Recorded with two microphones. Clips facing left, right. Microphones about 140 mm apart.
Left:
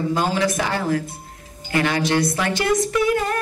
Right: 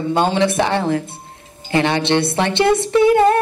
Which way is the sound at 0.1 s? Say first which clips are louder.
Right 8 dB; 25° right (ahead or behind).